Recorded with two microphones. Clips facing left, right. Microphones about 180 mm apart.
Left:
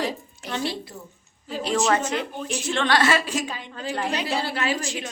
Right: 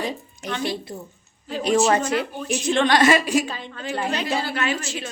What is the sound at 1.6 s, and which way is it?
A woman's voice, 15° right (ahead or behind).